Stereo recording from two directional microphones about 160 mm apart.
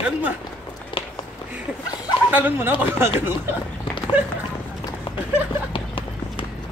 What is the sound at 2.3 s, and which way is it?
Speech, 10° right (ahead or behind).